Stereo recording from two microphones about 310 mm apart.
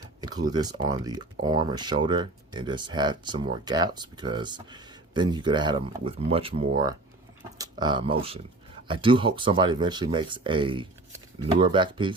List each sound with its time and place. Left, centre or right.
0.2 s speech: centre